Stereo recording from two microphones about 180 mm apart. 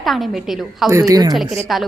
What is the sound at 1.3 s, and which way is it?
Speech, centre (ahead or behind).